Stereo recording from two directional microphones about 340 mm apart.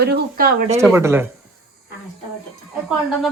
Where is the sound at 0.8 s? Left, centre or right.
Centre.